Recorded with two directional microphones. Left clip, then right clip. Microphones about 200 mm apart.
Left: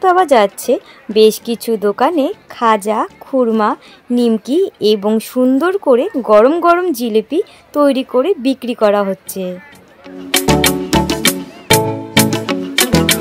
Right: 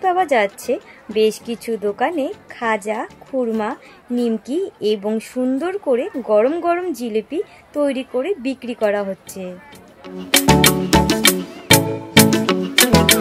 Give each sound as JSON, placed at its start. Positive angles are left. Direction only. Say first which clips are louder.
{"t": 0.0, "sound": "a woman's voice", "louder": "left 6 dB", "side_deg": 45}
{"t": 10.0, "sound": "music", "louder": "even", "side_deg": 0}